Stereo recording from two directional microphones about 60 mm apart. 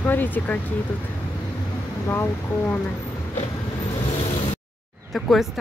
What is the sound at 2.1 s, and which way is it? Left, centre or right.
Speech, left.